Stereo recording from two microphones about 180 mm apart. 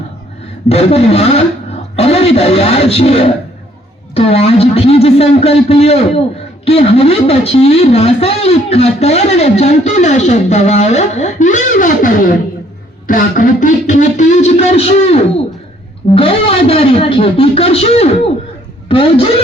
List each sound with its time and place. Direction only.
0.7 s speech: 35° left (ahead or behind)